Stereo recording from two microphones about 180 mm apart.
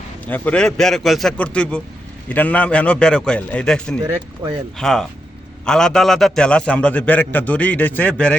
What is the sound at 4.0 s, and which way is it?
Speech, 25° right (ahead or behind).